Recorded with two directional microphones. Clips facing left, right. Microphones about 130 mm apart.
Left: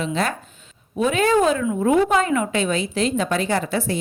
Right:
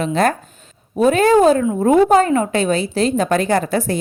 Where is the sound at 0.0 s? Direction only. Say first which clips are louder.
Right 6 dB; 45° right (ahead or behind).